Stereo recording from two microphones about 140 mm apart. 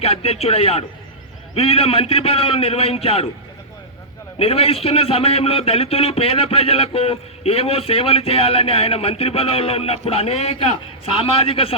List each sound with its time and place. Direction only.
0.0 s a man's voice: 45° left (ahead or behind)
4.4 s a man's voice: 45° left (ahead or behind)